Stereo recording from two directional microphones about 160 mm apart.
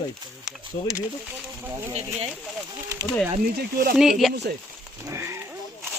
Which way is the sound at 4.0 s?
Centre (ahead or behind).